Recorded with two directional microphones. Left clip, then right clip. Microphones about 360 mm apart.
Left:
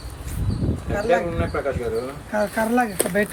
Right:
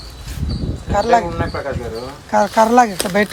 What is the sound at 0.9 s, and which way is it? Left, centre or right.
Speech, centre.